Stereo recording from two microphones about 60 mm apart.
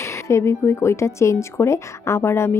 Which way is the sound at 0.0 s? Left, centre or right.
Left.